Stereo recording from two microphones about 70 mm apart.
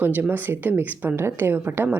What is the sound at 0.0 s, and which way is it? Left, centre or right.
Speech, right.